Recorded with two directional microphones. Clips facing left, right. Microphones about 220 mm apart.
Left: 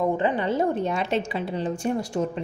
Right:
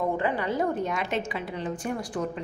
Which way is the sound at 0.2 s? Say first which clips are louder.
Left 3 dB; 25° left (ahead or behind).